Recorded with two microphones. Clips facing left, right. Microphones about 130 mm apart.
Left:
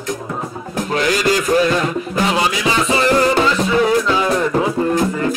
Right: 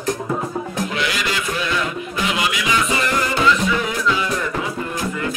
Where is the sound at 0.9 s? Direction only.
40° left (ahead or behind).